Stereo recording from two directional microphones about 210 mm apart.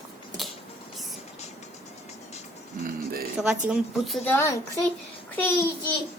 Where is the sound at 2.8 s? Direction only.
45° right (ahead or behind).